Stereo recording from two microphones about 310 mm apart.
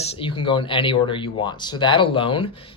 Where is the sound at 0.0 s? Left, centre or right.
Centre.